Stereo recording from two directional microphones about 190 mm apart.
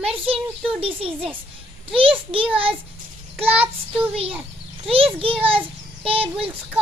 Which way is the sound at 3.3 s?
30° right (ahead or behind).